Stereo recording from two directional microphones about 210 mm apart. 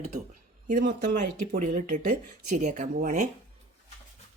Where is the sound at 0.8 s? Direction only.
50° right (ahead or behind).